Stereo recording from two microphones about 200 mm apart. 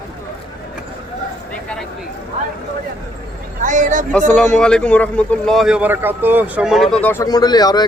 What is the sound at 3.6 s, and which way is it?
Speech, 40° right (ahead or behind).